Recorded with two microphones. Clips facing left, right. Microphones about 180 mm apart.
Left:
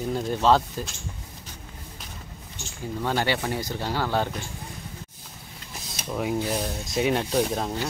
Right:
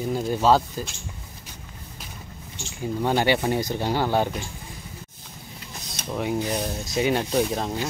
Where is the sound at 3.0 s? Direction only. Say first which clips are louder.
Right 4 dB; 15° right (ahead or behind).